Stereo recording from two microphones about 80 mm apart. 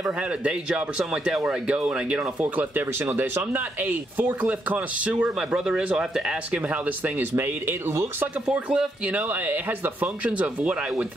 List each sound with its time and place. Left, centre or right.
0.4 s speech: centre
7.3 s speech: right
8.5 s speech: centre